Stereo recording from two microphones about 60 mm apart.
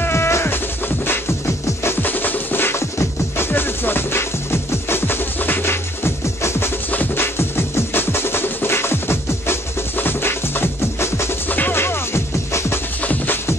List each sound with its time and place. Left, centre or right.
0.0 s music: left
2.0 s music: left
6.9 s music: left
7.3 s music: left
13.0 s music: left